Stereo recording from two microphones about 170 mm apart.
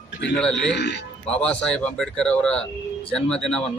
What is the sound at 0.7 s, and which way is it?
Speech, 90° left.